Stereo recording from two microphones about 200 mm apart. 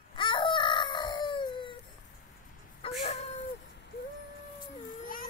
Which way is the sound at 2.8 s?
30° left (ahead or behind).